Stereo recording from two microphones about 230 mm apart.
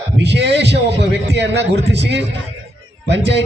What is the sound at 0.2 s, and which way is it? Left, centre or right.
A man's voice, right.